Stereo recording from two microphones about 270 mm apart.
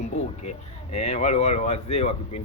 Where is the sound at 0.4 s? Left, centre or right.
Left.